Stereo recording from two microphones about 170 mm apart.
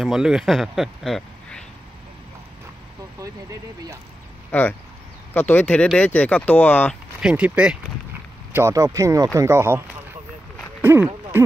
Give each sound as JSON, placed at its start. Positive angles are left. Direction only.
{"t": 0.0, "sound": "speech", "side_deg": -5}
{"t": 4.5, "sound": "speech", "side_deg": 10}
{"t": 7.2, "sound": "speech", "side_deg": -5}
{"t": 8.5, "sound": "speech", "side_deg": -20}